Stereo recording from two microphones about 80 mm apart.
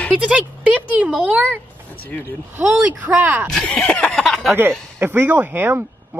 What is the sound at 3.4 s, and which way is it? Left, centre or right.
Snicker, centre.